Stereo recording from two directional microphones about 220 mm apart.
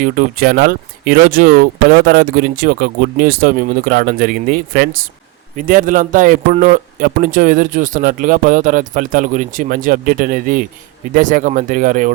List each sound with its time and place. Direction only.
0.0 s a man's voice: 40° right (ahead or behind)